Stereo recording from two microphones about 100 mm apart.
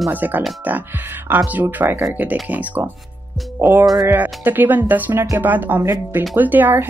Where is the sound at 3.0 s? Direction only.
Centre (ahead or behind).